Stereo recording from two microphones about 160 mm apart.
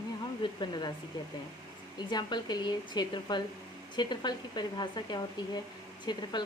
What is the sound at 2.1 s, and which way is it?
Speech, 25° left (ahead or behind).